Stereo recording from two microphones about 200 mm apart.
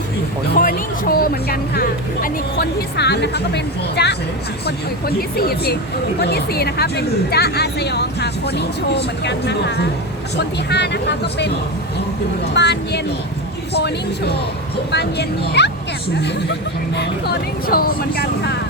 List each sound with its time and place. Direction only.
0.4 s speech: 50° left (ahead or behind)
12.5 s speech: 55° left (ahead or behind)
16.9 s speech: 55° left (ahead or behind)